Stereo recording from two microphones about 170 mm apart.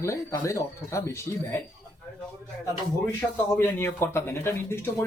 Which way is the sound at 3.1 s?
15° left (ahead or behind).